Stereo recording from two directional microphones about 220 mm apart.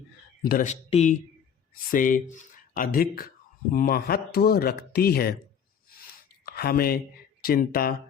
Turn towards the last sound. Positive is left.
turn(degrees=40)  # may be behind; listen again after turning